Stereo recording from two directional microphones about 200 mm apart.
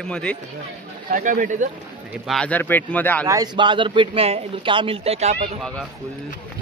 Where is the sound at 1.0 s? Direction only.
45° right (ahead or behind).